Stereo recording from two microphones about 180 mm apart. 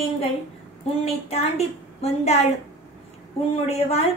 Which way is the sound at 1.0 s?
35° left (ahead or behind).